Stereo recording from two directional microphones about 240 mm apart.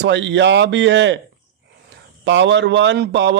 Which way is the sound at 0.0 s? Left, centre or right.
Right.